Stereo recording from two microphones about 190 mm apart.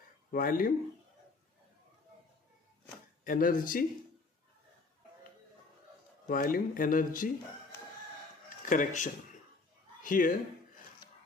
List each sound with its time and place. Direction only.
0.3 s speech: 50° left (ahead or behind)
3.3 s speech: 50° left (ahead or behind)
6.2 s speech: 50° left (ahead or behind)
8.5 s speech: 45° left (ahead or behind)